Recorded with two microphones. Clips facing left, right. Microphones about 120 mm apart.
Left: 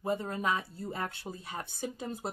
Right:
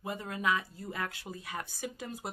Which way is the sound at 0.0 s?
30° left (ahead or behind).